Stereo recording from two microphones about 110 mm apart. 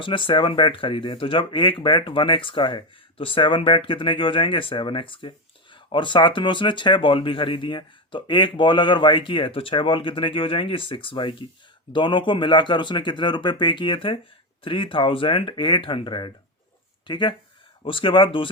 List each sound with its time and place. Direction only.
0.0 s speech: 50° left (ahead or behind)